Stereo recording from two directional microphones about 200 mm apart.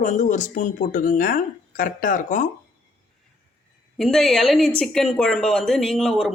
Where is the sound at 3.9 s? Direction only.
Centre (ahead or behind).